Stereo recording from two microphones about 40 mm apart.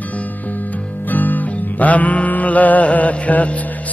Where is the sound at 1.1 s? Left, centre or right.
Left.